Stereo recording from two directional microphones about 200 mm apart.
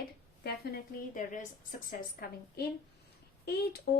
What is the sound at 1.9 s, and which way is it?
Speech, 50° left (ahead or behind).